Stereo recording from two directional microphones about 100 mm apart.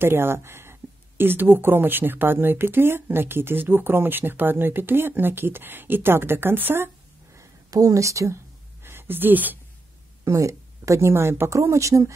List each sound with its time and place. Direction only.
0.0 s a woman's voice: 25° right (ahead or behind)
7.3 s a woman's voice: 35° right (ahead or behind)
8.8 s speech: 20° right (ahead or behind)
10.2 s a woman's voice: 30° right (ahead or behind)